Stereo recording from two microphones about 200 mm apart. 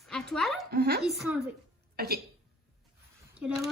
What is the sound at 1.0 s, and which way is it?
Speech, centre (ahead or behind).